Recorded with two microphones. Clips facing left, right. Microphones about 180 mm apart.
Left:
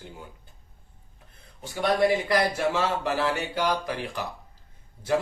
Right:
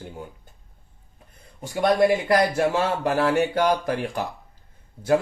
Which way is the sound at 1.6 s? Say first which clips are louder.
Right 4 dB; 45° right (ahead or behind).